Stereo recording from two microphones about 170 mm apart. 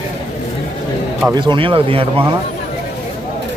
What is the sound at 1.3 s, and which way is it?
Speech, 30° right (ahead or behind).